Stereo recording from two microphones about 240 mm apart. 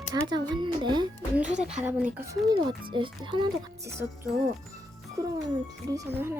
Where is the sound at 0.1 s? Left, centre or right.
Centre.